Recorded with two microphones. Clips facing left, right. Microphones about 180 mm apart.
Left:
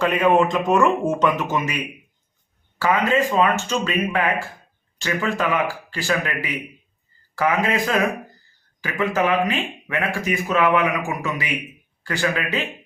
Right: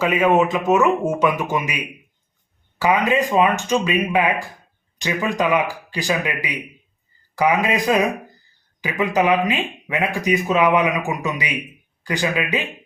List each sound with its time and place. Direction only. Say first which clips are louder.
0.0 s speech: right 1 dB; 5° right (ahead or behind)